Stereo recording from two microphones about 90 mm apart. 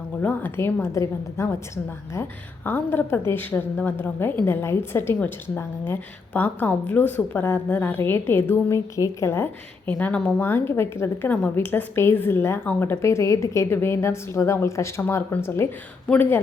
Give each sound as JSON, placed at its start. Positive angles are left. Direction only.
{"t": 0.2, "sound": "a woman's voice", "side_deg": 20}
{"t": 9.8, "sound": "a woman's voice", "side_deg": 15}
{"t": 10.4, "sound": "a woman's voice", "side_deg": 25}